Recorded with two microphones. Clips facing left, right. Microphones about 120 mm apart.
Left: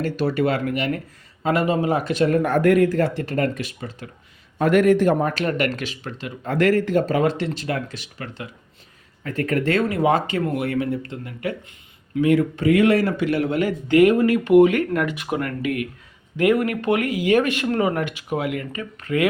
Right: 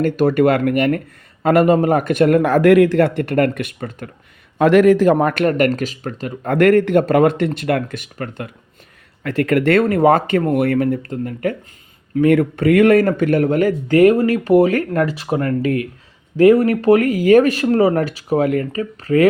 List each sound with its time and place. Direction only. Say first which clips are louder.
0.0 s speech: right 7 dB; 55° right (ahead or behind)
4.5 s speech: right 5 dB; 90° right; by 8.4 s 50° right (ahead or behind)
9.2 s speech: right 6 dB; 90° right; by 11.5 s 45° right (ahead or behind)
12.2 s speech: right 4 dB; 60° right (ahead or behind); by 19.3 s 35° right (ahead or behind)